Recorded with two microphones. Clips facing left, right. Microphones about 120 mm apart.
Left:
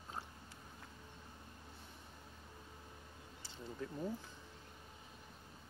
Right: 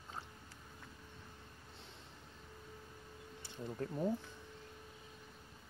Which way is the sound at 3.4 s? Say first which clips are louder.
Right 4 dB; 55° right (ahead or behind).